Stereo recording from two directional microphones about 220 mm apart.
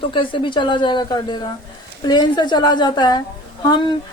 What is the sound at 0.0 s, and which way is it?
A woman's voice, 20° left (ahead or behind).